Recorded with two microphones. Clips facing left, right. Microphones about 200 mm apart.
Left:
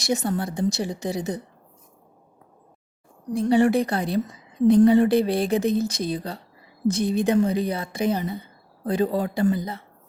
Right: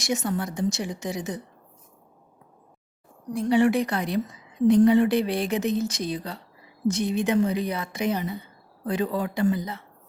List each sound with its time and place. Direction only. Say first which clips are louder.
0.0 s speech: left 2 dB; 35° left (ahead or behind)
3.3 s speech: left 2 dB; 35° left (ahead or behind)